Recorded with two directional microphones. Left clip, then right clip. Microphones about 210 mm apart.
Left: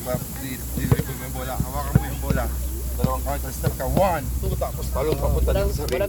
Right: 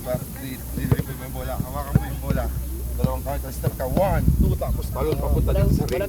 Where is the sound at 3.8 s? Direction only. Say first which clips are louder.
Left 1 dB; 5° right (ahead or behind).